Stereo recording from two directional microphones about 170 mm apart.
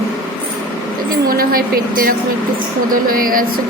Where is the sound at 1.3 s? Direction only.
60° right (ahead or behind).